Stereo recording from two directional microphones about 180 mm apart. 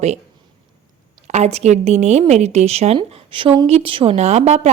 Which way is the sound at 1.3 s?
35° right (ahead or behind).